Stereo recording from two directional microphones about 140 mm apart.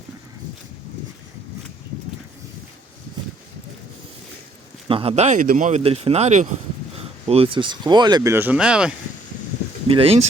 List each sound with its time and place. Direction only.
4.9 s speech: 40° right (ahead or behind); by 5.8 s 60° right (ahead or behind)
5.8 s speech: 45° right (ahead or behind)
7.3 s speech: 40° right (ahead or behind)
8.3 s speech: 15° right (ahead or behind)
9.9 s speech: 40° right (ahead or behind)